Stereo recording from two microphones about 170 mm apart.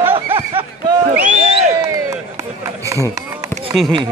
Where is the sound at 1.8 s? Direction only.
20° right (ahead or behind).